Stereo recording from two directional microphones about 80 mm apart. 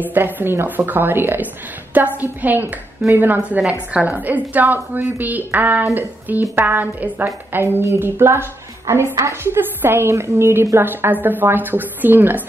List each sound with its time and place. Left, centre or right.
0.0 s a woman's voice: right